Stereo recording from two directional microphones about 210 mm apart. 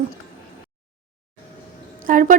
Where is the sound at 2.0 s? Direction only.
40° right (ahead or behind).